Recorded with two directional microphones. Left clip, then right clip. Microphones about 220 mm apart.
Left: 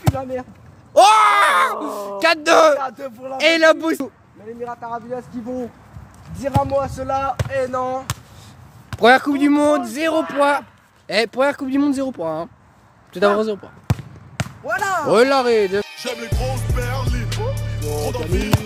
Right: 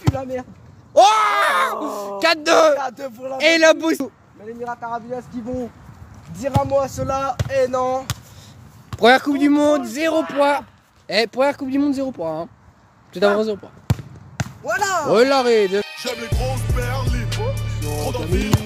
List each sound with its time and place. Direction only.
0.1 s speech: 40° right (ahead or behind)
0.9 s groan: 5° left (ahead or behind)
1.8 s speech: 50° right (ahead or behind)
2.1 s speech: centre (ahead or behind)
2.8 s speech: 45° right (ahead or behind)
3.3 s speech: 5° right (ahead or behind)
4.6 s speech: 35° right (ahead or behind)
6.6 s speech: 50° right (ahead or behind)
7.4 s speech: 40° right (ahead or behind)
9.0 s speech: centre (ahead or behind)
13.9 s basketball bounce: 10° right (ahead or behind)
14.7 s speech: 45° right (ahead or behind)
15.0 s music: centre (ahead or behind)